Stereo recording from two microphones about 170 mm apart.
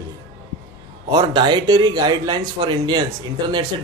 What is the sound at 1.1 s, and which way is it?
Speech, 25° right (ahead or behind).